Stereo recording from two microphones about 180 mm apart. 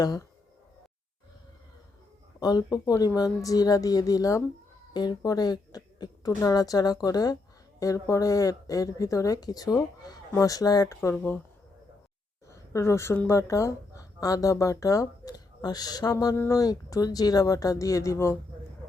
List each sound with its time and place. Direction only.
0.0 s speech: 20° left (ahead or behind)
2.4 s speech: 20° left (ahead or behind)
11.1 s speech: 10° left (ahead or behind)
12.5 s speech: 15° left (ahead or behind)